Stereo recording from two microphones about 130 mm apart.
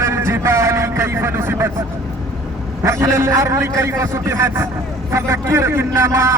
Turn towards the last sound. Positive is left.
turn(degrees=-20)  # may be behind; listen again after turning